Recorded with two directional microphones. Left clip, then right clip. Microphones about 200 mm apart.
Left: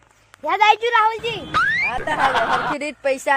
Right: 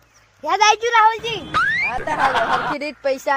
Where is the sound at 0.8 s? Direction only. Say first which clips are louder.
Right 2 dB; 5° left (ahead or behind).